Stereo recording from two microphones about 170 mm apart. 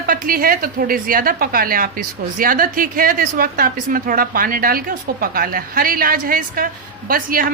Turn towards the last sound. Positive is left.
turn(degrees=-55)  # may be behind; listen again after turning